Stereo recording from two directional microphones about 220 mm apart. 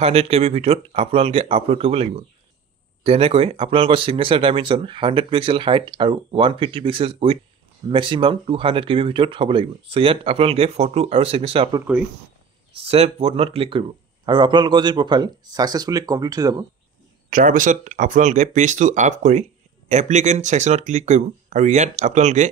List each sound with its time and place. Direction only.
0.0 s speech: 25° right (ahead or behind)
17.3 s speech: 35° right (ahead or behind)